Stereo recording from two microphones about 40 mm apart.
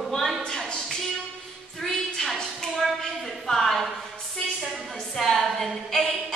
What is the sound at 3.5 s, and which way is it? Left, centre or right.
Speech, centre.